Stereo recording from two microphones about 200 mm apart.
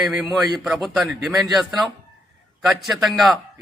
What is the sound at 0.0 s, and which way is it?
A man's voice, centre (ahead or behind).